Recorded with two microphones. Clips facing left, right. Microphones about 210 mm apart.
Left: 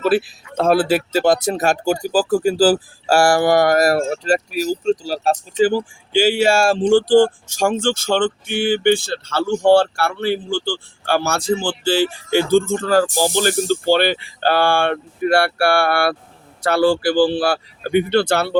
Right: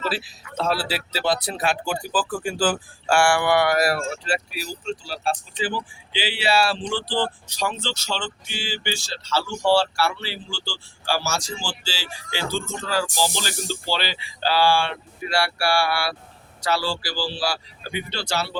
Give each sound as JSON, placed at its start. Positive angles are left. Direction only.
{"t": 0.0, "sound": "speech", "side_deg": 55}